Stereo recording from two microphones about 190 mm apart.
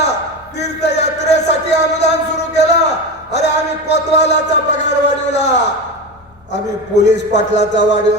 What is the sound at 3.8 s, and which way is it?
A man's voice, 65° left (ahead or behind).